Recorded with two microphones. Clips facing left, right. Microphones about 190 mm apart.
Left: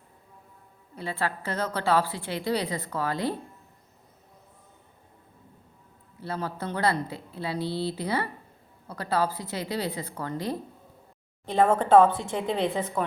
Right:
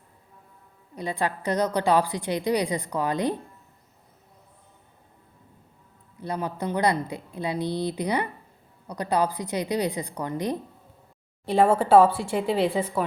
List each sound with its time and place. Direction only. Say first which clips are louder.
0.9 s a woman's voice: right 3 dB; 15° right (ahead or behind)
6.2 s a woman's voice: right 3 dB; 15° right (ahead or behind)